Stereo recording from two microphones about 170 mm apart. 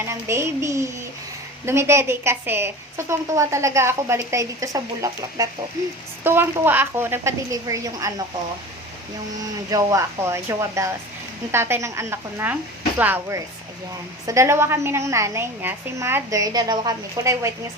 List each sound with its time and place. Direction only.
0.0 s a woman's voice: 15° right (ahead or behind)
9.6 s a woman's voice: 20° right (ahead or behind)